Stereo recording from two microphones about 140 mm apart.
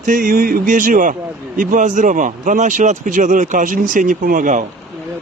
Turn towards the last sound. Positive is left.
turn(degrees=-65)  # may be behind; listen again after turning